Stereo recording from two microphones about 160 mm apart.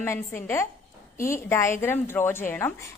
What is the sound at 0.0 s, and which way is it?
A woman's voice, 15° left (ahead or behind).